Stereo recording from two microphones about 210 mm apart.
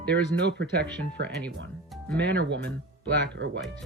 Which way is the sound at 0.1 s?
50° right (ahead or behind).